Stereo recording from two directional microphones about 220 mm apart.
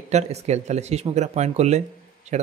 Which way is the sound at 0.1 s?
30° right (ahead or behind).